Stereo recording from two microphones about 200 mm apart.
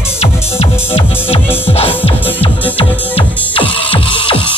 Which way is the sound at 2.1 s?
10° left (ahead or behind).